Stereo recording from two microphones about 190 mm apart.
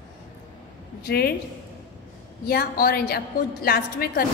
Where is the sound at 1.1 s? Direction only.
55° left (ahead or behind).